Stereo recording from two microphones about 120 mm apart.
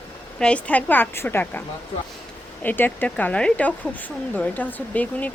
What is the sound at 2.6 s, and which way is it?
Speech, 15° left (ahead or behind).